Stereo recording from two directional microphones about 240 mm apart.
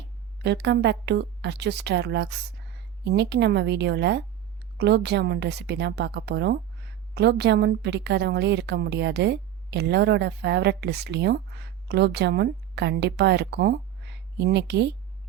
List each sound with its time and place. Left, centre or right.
0.4 s a woman's voice: right